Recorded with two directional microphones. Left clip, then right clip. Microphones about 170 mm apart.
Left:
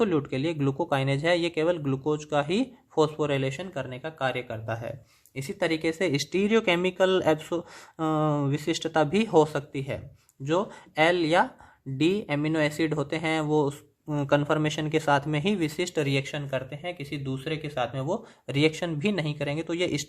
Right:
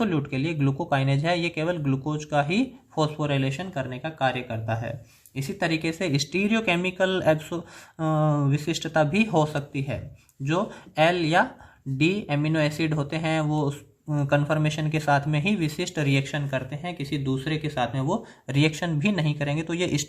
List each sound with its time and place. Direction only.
0.0 s speech: 40° left (ahead or behind)